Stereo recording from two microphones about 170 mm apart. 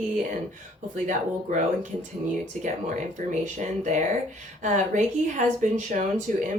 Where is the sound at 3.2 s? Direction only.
45° right (ahead or behind).